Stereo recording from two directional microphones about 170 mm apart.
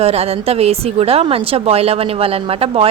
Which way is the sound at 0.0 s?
35° right (ahead or behind).